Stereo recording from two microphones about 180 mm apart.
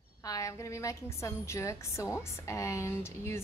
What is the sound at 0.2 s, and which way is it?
A woman's voice, 20° left (ahead or behind).